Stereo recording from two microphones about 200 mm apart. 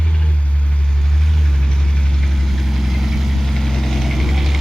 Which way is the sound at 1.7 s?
5° left (ahead or behind).